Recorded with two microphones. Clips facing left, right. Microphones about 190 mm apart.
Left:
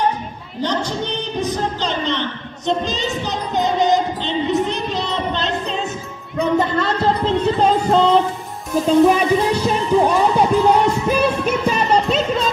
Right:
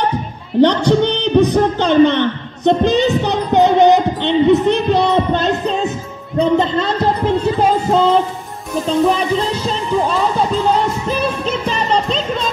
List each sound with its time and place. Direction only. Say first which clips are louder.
0.6 s a man's voice: right 11 dB; 65° right (ahead or behind)
6.3 s a sound: right 3 dB; 25° right (ahead or behind); by 8.2 s 5° right (ahead or behind)
8.8 s speech: left 2 dB; 5° left (ahead or behind)
11.1 s music: left 1 dB; 10° left (ahead or behind)